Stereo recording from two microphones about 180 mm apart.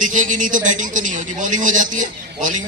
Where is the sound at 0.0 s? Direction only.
45° right (ahead or behind).